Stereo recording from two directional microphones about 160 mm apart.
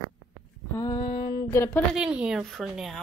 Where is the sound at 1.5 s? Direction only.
15° left (ahead or behind).